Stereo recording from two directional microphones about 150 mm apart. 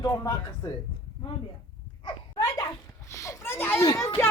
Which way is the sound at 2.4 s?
20° left (ahead or behind).